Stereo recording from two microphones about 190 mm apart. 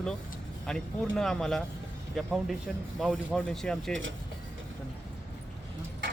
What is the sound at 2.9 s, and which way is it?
Speech, 5° left (ahead or behind).